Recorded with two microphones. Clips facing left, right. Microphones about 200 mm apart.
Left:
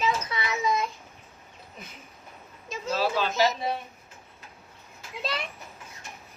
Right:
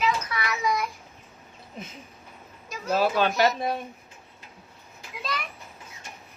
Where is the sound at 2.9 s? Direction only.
55° right (ahead or behind).